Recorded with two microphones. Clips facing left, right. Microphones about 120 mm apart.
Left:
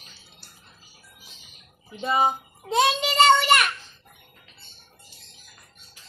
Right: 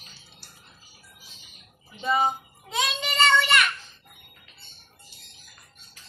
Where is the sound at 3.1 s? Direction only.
35° left (ahead or behind).